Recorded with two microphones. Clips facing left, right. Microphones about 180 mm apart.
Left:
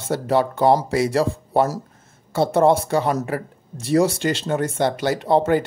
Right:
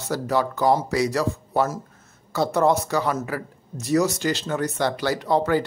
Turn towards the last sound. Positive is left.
turn(degrees=25)  # may be behind; listen again after turning